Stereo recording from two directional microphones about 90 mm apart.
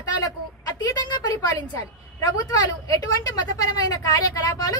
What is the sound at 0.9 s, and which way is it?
A woman's voice, 45° left (ahead or behind).